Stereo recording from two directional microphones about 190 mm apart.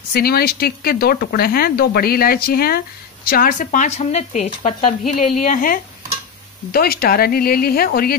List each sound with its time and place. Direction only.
0.1 s speech: 55° left (ahead or behind)